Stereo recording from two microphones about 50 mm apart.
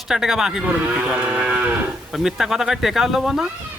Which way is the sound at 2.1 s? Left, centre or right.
Centre.